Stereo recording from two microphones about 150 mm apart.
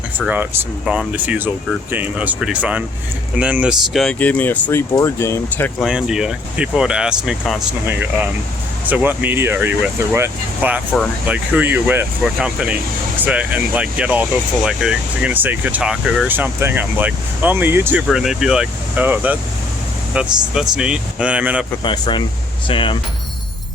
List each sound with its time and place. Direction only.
0.3 s speech: 10° right (ahead or behind)
4.2 s speech: 10° left (ahead or behind)
5.8 s speech: 5° right (ahead or behind)
18.1 s speech: 5° right (ahead or behind)
21.8 s speech: 30° left (ahead or behind)